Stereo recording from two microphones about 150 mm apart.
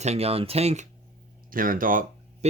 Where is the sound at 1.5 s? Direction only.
70° right (ahead or behind).